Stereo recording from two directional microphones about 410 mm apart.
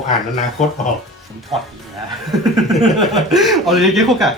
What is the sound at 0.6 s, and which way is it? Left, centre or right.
Speech, centre.